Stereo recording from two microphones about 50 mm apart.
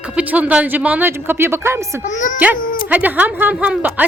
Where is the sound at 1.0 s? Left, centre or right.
Right.